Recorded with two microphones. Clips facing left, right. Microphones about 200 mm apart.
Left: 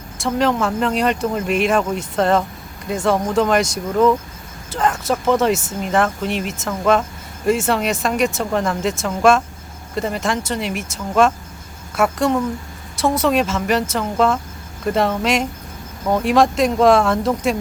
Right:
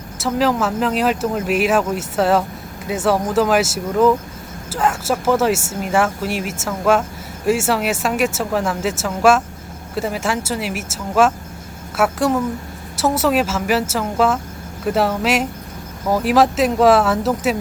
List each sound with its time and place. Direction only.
0.2 s speech: 5° right (ahead or behind)